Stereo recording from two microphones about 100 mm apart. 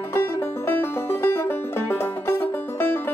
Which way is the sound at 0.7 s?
20° left (ahead or behind).